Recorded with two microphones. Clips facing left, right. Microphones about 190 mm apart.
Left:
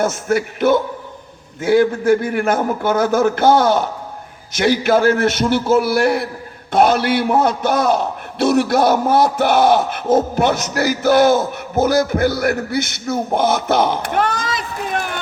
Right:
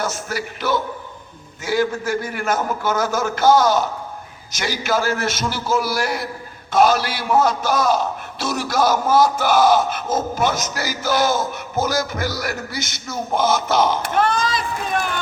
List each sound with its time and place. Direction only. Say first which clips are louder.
0.0 s a man's voice: left 8 dB; 55° left (ahead or behind)